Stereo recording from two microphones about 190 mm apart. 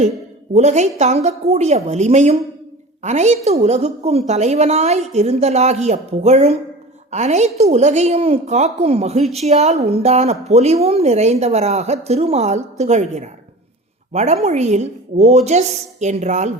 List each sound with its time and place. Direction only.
0.5 s a woman's voice: 35° right (ahead or behind)